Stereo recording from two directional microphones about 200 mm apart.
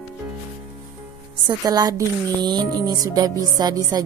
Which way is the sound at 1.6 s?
20° right (ahead or behind).